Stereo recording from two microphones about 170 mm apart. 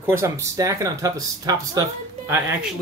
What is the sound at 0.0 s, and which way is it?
Speech, 15° right (ahead or behind).